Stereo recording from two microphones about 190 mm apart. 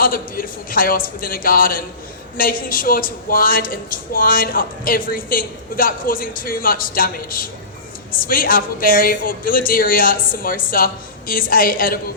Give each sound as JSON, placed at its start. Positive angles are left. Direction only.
{"t": 0.0, "sound": "a woman's voice", "side_deg": 50}